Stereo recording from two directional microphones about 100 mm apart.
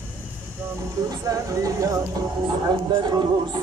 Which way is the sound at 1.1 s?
35° right (ahead or behind).